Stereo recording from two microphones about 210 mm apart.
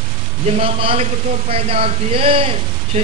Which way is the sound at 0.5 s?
30° right (ahead or behind).